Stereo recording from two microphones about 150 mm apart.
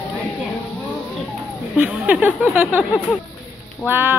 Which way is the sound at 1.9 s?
10° right (ahead or behind).